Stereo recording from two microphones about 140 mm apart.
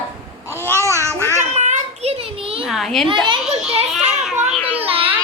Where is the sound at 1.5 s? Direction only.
55° right (ahead or behind).